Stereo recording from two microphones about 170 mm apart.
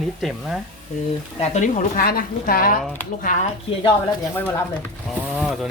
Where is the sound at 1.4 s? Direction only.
45° left (ahead or behind).